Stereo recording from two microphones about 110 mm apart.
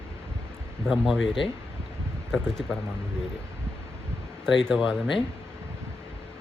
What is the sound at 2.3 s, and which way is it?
Speech, 5° left (ahead or behind).